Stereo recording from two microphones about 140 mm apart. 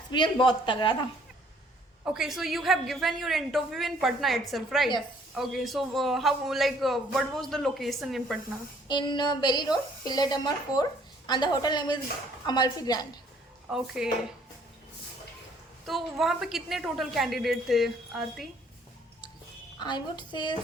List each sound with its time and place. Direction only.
0.1 s speech: 35° left (ahead or behind)
2.0 s a man's voice: 5° right (ahead or behind)
8.9 s a woman's voice: 35° left (ahead or behind)
13.7 s a man's voice: 5° right (ahead or behind)
15.9 s a man's voice: centre (ahead or behind)
19.8 s speech: 30° left (ahead or behind)